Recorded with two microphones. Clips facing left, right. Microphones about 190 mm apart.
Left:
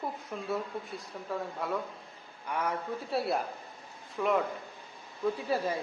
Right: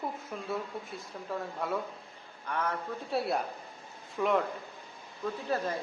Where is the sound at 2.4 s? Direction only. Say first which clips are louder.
Left 1 dB; 10° left (ahead or behind).